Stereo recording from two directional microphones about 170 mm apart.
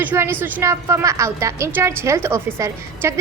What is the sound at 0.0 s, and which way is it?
A woman's voice, 10° right (ahead or behind).